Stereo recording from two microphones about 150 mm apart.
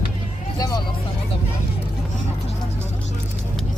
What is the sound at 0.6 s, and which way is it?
Vehicle, 25° left (ahead or behind).